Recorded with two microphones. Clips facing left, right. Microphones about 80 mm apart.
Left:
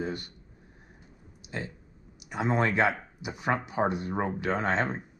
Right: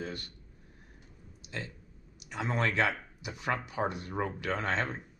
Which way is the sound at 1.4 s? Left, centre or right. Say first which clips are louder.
Left 4 dB; centre.